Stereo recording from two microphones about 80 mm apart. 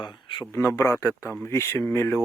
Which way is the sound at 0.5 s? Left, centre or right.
Left.